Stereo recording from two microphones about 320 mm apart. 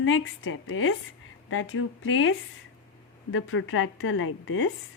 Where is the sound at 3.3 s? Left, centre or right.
Left.